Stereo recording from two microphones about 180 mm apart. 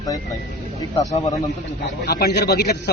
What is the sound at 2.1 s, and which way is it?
Speech, 60° left (ahead or behind).